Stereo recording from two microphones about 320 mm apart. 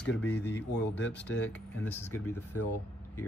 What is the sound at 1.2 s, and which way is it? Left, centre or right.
Speech, centre.